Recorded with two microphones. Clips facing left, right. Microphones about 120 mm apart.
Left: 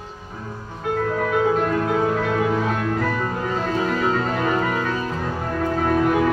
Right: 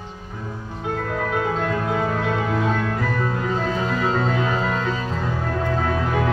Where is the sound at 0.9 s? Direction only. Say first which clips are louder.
Left 3 dB; 5° left (ahead or behind).